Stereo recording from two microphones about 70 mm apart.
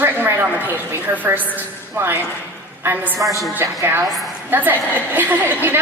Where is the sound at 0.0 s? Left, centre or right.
Right.